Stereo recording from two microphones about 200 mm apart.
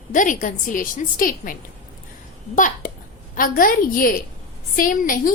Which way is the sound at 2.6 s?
40° left (ahead or behind).